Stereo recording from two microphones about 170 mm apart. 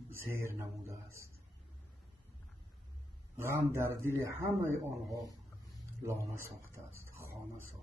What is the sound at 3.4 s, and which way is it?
A man's voice, 15° right (ahead or behind).